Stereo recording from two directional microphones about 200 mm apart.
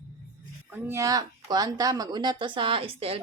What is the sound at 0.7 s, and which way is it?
Speech, 10° right (ahead or behind).